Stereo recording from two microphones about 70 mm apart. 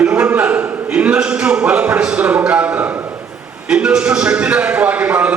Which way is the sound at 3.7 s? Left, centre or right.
Centre.